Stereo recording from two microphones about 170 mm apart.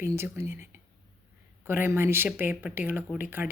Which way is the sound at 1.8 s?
15° right (ahead or behind).